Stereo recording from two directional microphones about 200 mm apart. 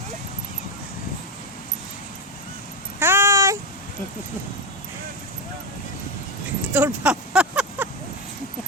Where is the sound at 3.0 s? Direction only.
10° right (ahead or behind).